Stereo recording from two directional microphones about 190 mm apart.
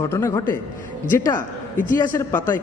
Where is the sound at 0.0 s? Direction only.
15° left (ahead or behind).